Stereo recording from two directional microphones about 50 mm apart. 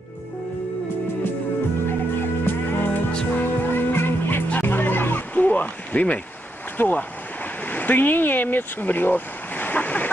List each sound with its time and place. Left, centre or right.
2.4 s music: left
6.8 s speech: left